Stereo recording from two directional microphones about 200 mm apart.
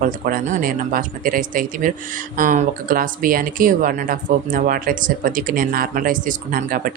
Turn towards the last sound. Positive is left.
turn(degrees=-45)  # may be behind; listen again after turning